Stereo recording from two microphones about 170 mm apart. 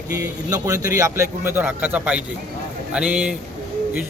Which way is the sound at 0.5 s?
20° right (ahead or behind).